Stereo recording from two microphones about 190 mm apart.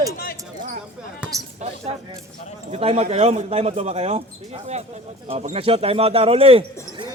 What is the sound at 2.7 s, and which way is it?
Speech, 30° right (ahead or behind).